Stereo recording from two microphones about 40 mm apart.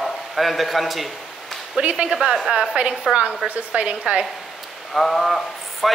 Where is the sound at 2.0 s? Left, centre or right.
Right.